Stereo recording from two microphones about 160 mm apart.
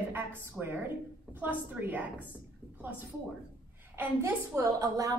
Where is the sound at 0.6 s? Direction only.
Centre (ahead or behind).